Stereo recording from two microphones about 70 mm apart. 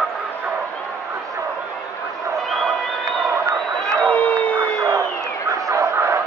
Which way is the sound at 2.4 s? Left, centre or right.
Centre.